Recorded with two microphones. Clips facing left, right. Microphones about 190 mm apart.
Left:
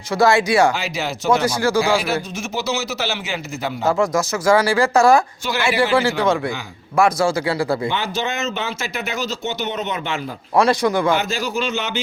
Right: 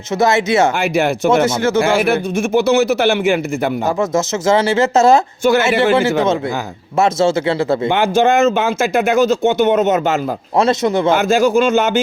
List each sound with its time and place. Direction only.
0.2 s speech: 20° right (ahead or behind)
0.8 s speech: 55° right (ahead or behind)
1.5 s speech: 25° right (ahead or behind)
1.8 s speech: 55° right (ahead or behind)
3.8 s speech: 25° right (ahead or behind)
7.9 s speech: 50° right (ahead or behind)
10.6 s speech: 25° right (ahead or behind)
11.1 s speech: 45° right (ahead or behind)